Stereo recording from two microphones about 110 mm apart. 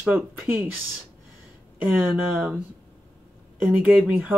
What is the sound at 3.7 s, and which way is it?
Speech, 15° right (ahead or behind).